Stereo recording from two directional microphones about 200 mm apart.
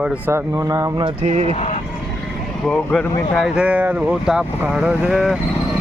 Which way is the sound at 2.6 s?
5° left (ahead or behind).